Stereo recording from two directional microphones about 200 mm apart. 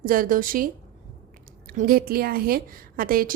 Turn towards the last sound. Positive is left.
turn(degrees=-45)  # may be behind; listen again after turning